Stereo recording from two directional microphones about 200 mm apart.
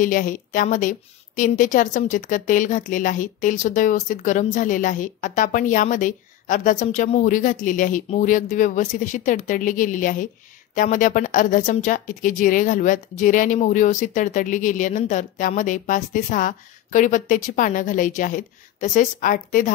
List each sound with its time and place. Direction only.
0.0 s a woman's voice: 40° left (ahead or behind)